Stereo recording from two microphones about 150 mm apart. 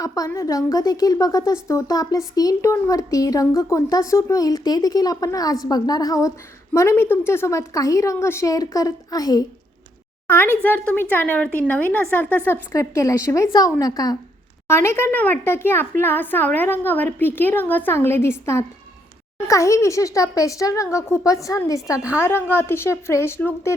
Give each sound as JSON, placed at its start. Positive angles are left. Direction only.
{"t": 0.0, "sound": "speech", "side_deg": 20}
{"t": 10.2, "sound": "a child's voice", "side_deg": 15}